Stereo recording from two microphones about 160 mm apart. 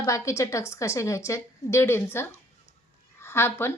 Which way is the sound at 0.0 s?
20° left (ahead or behind).